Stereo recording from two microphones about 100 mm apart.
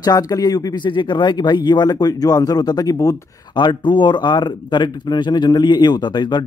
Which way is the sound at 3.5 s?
50° left (ahead or behind).